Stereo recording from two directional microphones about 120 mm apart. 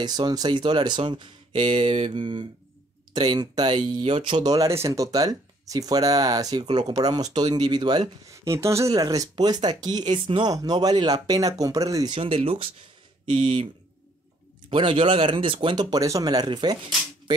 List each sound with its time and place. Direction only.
0.0 s speech: 35° right (ahead or behind)
1.6 s mantra: 60° right (ahead or behind); by 2.4 s 45° right (ahead or behind)
3.1 s speech: 35° right (ahead or behind)
8.5 s speech: 25° right (ahead or behind); by 10.5 s 45° right (ahead or behind)
10.5 s speech: 30° right (ahead or behind)
12.1 s speech: 50° right (ahead or behind)
14.7 s speech: 45° right (ahead or behind)